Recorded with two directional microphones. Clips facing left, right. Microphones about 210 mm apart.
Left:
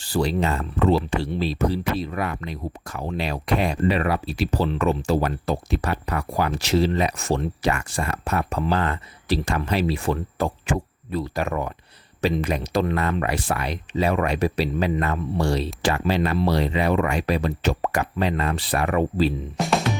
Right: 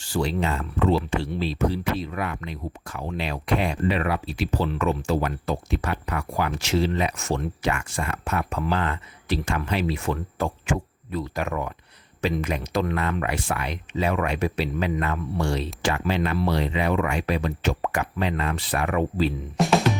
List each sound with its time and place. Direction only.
0.0 s speech: 35° left (ahead or behind)
19.5 s music: centre (ahead or behind)